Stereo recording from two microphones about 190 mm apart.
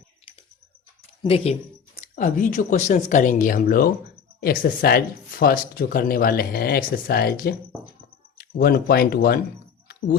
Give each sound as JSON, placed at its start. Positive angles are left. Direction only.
{"t": 1.2, "sound": "speech", "side_deg": 30}
{"t": 2.0, "sound": "speech", "side_deg": 45}